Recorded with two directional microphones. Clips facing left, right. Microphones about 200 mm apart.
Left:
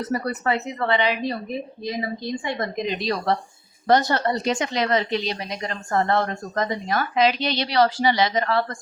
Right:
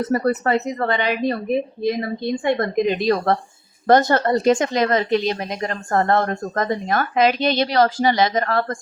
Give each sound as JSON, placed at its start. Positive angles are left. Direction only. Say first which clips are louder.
{"t": 0.1, "sound": "speech", "louder": "right 5 dB", "side_deg": -45}